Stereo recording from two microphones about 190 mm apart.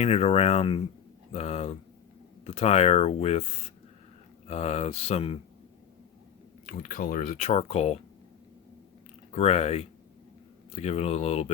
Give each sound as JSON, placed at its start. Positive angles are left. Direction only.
{"t": 0.0, "sound": "speech", "side_deg": 35}
{"t": 4.4, "sound": "speech", "side_deg": 35}
{"t": 6.7, "sound": "speech", "side_deg": 50}
{"t": 9.3, "sound": "speech", "side_deg": 35}